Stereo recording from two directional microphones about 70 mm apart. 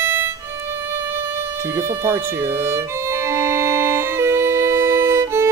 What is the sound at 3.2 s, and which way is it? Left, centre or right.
Music, right.